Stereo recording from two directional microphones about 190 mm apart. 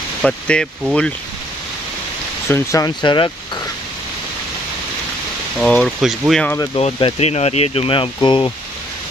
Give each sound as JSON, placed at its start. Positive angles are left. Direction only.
{"t": 0.2, "sound": "speech", "side_deg": 5}
{"t": 2.4, "sound": "speech", "side_deg": 15}
{"t": 5.6, "sound": "speech", "side_deg": 5}
{"t": 6.7, "sound": "speech", "side_deg": 25}